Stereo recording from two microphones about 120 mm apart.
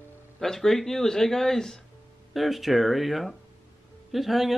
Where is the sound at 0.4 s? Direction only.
5° left (ahead or behind).